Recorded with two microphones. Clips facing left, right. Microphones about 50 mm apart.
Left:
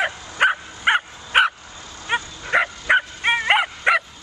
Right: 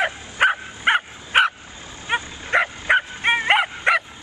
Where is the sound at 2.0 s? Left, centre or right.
Centre.